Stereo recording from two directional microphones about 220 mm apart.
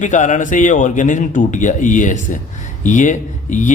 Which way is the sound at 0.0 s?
35° left (ahead or behind).